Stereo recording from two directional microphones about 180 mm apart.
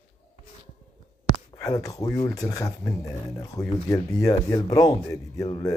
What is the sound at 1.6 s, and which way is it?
Speech, 20° left (ahead or behind).